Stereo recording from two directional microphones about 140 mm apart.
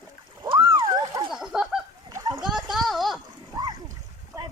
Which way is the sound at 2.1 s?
20° right (ahead or behind).